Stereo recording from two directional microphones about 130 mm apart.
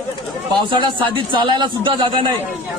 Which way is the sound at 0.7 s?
40° right (ahead or behind).